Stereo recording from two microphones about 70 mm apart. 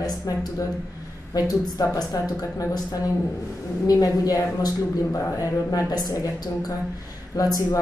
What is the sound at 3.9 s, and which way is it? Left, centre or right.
Speech, left.